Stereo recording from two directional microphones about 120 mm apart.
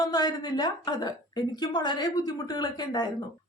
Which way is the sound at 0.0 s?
35° left (ahead or behind).